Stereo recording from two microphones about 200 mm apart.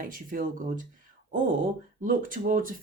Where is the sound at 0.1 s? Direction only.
40° right (ahead or behind).